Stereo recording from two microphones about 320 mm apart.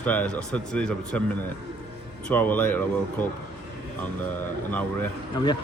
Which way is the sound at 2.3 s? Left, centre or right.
Centre.